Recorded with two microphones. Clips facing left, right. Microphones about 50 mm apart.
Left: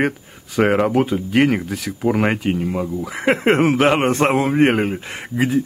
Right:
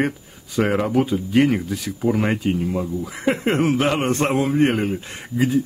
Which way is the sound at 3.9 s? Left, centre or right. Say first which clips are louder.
Left 4 dB; left.